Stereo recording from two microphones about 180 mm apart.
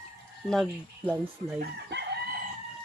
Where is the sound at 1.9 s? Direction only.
75° right (ahead or behind).